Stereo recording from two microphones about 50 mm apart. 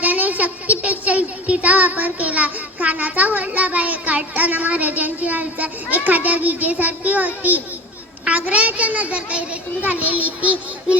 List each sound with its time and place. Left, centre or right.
0.0 s a child's voice: right